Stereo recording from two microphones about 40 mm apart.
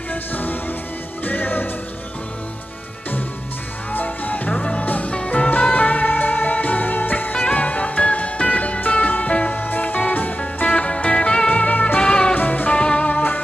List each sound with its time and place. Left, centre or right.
0.1 s music: left
4.0 s music: left
4.5 s music: left
4.8 s music: left
5.1 s music: left
5.5 s music: left
7.5 s music: left
9.6 s music: left
10.6 s music: left
11.5 s music: left
12.0 s music: left
12.4 s music: left
12.7 s music: left